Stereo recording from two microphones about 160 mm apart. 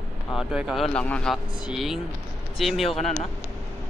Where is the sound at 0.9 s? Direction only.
5° left (ahead or behind).